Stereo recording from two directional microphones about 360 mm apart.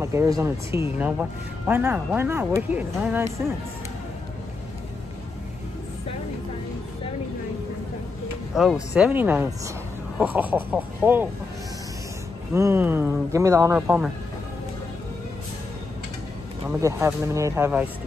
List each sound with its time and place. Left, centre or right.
0.0 s speech: centre
8.5 s speech: centre
12.5 s speech: centre
16.6 s speech: centre